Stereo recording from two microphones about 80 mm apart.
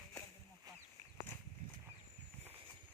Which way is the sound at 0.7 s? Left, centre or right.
Right.